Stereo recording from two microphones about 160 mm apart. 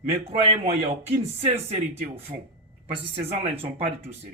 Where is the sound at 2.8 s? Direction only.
40° right (ahead or behind).